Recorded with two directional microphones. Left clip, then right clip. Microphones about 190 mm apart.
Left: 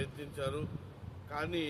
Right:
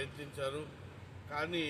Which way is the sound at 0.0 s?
20° left (ahead or behind).